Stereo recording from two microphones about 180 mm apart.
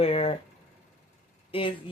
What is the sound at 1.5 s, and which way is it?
Speech, 30° left (ahead or behind).